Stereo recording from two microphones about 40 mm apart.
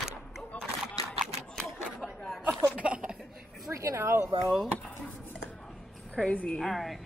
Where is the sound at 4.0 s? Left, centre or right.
Right.